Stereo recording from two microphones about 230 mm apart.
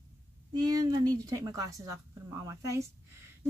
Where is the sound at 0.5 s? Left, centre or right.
Centre.